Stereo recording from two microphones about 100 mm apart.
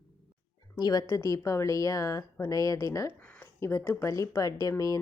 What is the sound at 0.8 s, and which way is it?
Speech, 40° left (ahead or behind).